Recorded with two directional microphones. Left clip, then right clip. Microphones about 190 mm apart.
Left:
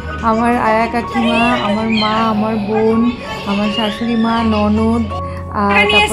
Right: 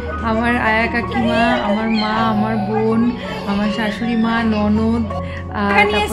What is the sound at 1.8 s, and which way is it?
Speech, centre (ahead or behind).